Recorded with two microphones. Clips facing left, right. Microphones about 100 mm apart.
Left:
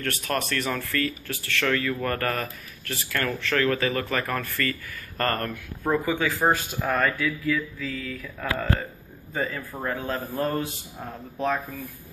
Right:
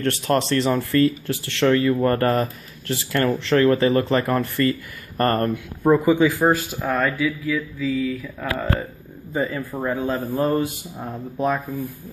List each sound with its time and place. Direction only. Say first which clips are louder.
0.0 s speech: right 7 dB; 25° right (ahead or behind)
5.9 s speech: right 8 dB; 5° right (ahead or behind)
6.1 s speech: right 8 dB; 15° right (ahead or behind)
6.4 s speech: right 4 dB; 5° right (ahead or behind)